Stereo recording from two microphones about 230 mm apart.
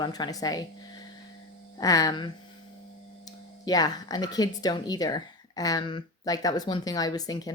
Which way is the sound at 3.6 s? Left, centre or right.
Centre.